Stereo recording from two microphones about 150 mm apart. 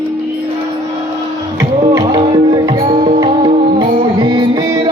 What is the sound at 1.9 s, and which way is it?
Music, 30° right (ahead or behind).